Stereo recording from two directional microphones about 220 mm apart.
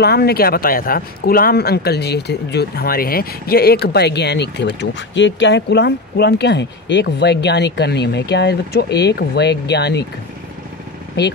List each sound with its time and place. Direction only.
0.0 s speech: 45° left (ahead or behind)